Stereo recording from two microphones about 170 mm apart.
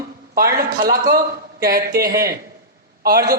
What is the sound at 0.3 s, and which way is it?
Speech, 65° right (ahead or behind).